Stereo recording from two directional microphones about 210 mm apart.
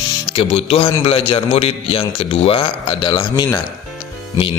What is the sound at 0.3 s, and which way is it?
Speech, 25° left (ahead or behind).